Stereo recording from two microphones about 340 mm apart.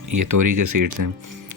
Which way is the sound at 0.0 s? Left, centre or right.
Right.